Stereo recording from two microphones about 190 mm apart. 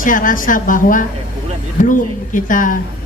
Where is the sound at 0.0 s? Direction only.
45° left (ahead or behind).